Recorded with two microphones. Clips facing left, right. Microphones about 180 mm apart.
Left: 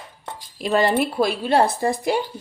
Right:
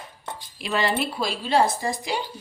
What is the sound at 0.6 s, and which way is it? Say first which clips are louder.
Speech: left 6 dB; 45° left (ahead or behind).